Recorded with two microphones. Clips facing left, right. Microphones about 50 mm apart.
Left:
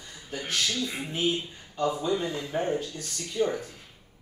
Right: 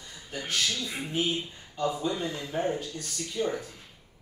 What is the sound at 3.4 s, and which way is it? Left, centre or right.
Speech, centre.